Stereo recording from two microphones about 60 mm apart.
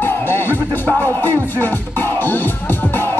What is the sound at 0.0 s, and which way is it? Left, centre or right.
Music, left.